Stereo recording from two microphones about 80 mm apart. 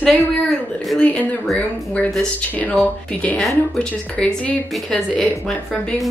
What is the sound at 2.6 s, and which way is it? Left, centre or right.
Speech, centre.